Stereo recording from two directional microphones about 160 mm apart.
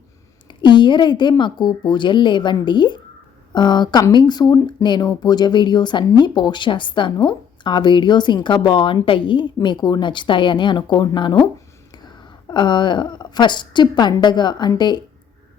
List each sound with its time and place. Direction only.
0.4 s a woman's voice: 30° left (ahead or behind)